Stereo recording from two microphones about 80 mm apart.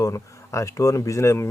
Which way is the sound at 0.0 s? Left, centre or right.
Left.